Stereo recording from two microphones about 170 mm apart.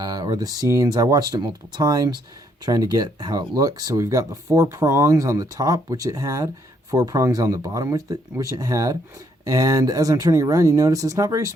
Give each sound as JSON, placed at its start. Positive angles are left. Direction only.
{"t": 0.0, "sound": "speech", "side_deg": -20}